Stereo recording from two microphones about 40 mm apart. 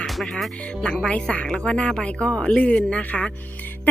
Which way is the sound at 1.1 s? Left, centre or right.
Left.